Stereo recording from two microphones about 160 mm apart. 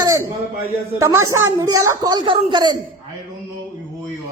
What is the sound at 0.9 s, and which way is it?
Speech, 20° right (ahead or behind).